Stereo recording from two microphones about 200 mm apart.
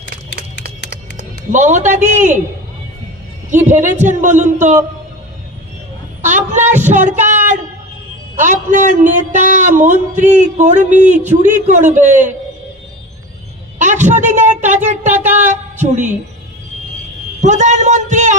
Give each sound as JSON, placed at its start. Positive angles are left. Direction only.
{"t": 0.0, "sound": "a sound", "side_deg": 65}
{"t": 1.5, "sound": "a man's voice", "side_deg": -35}
{"t": 3.7, "sound": "a man's voice", "side_deg": -35}
{"t": 6.2, "sound": "heart sounds", "side_deg": -35}
{"t": 6.9, "sound": "a sound", "side_deg": -35}
{"t": 8.4, "sound": "a man's voice", "side_deg": -40}
{"t": 13.7, "sound": "a sound", "side_deg": -35}
{"t": 15.2, "sound": "a woman's voice", "side_deg": -35}
{"t": 17.4, "sound": "a man's voice", "side_deg": -35}